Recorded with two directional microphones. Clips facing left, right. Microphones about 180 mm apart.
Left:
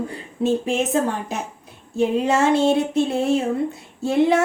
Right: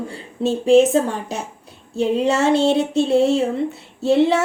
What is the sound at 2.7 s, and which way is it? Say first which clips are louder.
Speech: right 3 dB; 30° right (ahead or behind).